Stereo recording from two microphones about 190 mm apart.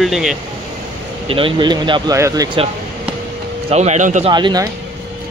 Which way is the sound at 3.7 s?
35° right (ahead or behind).